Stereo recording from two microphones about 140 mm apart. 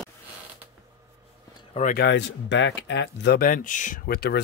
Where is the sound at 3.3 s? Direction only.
80° left; by 4.2 s 65° left (ahead or behind).